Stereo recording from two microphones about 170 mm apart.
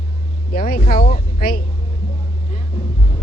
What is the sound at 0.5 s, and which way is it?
Speech, 55° left (ahead or behind).